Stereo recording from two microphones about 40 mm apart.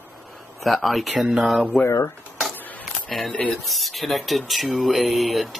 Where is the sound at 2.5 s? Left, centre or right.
Left.